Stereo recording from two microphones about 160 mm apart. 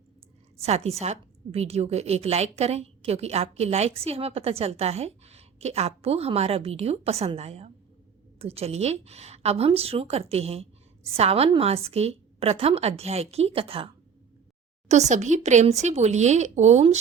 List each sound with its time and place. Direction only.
0.6 s a woman's voice: 40° right (ahead or behind)
14.8 s speech: 45° right (ahead or behind)